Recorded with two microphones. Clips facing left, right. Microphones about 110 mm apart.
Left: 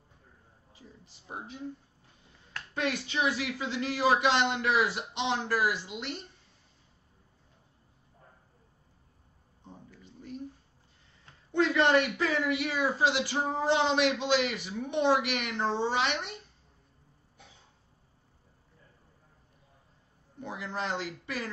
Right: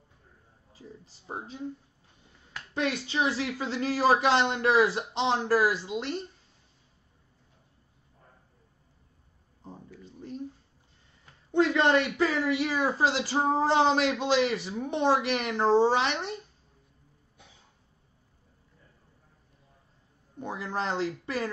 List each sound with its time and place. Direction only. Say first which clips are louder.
0.7 s a woman's voice: right 6 dB; 30° right (ahead or behind)
2.7 s a woman's voice: right 2 dB; 30° right (ahead or behind)
11.5 s a woman's voice: right 1 dB; 25° right (ahead or behind)
20.3 s a woman's voice: right 4 dB; 35° right (ahead or behind)